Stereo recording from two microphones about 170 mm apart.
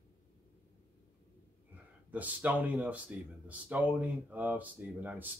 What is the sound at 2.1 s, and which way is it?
Speech, 10° right (ahead or behind).